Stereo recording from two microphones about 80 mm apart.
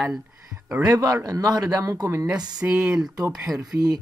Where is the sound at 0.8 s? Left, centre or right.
Right.